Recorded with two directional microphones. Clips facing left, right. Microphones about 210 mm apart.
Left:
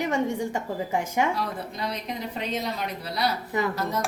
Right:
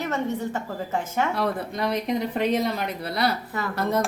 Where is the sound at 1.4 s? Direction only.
60° right (ahead or behind).